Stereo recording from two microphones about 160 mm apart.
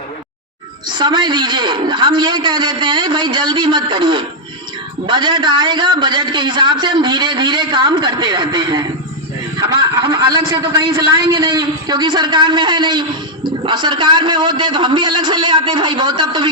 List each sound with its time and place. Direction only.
0.9 s a man's voice: 30° right (ahead or behind)